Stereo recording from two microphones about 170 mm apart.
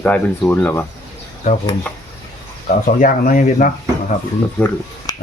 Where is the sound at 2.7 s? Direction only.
50° left (ahead or behind).